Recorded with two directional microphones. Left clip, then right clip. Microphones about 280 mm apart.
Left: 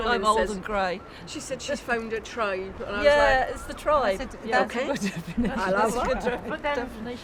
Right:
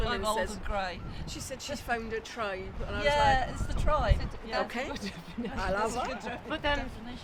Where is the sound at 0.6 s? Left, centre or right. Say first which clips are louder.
Left 7 dB; left.